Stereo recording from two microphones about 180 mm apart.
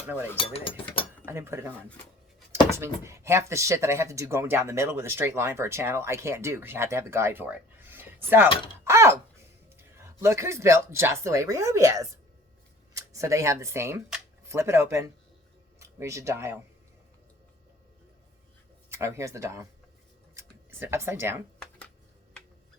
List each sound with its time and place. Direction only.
0.3 s speech: 30° left (ahead or behind)
1.2 s speech: 15° right (ahead or behind)
2.7 s speech: 15° right (ahead or behind)
8.8 s thunk: 15° right (ahead or behind)
10.2 s speech: 15° right (ahead or behind)
18.9 s speech: 15° right (ahead or behind)
20.3 s a sound: 15° right (ahead or behind)